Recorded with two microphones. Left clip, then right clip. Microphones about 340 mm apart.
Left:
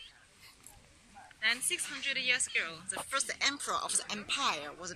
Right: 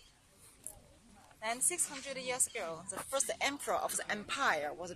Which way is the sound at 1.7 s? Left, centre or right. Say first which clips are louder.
Left 6 dB; centre.